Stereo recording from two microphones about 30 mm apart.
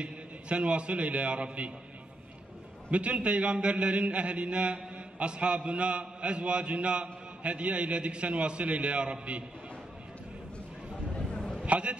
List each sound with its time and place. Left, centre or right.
0.0 s a man's voice: right
2.9 s mantra: right
11.1 s a sound: left
11.6 s a man's voice: right